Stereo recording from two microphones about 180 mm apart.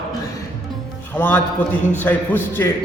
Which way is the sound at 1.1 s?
10° left (ahead or behind).